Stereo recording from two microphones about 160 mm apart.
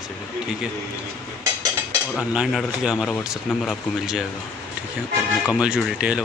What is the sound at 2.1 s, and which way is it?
Speech, 5° right (ahead or behind).